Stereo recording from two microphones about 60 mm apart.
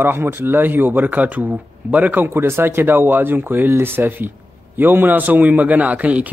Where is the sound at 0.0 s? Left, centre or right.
Right.